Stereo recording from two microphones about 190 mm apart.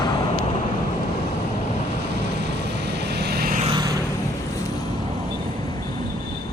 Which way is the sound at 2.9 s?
60° right (ahead or behind).